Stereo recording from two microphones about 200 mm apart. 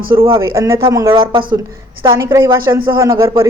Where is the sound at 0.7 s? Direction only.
25° right (ahead or behind).